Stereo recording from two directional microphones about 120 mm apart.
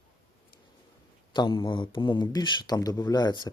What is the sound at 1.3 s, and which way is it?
Speech, 40° left (ahead or behind).